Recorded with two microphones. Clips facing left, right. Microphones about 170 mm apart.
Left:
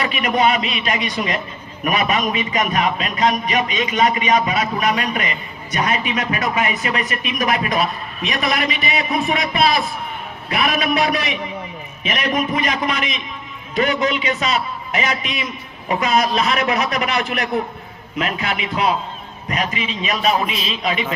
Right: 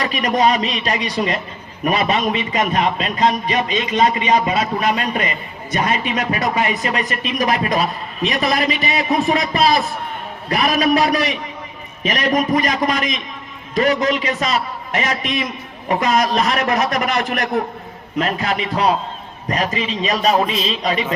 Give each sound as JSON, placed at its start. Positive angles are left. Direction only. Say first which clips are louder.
{"t": 0.0, "sound": "a man's voice", "louder": "right 1 dB", "side_deg": -35}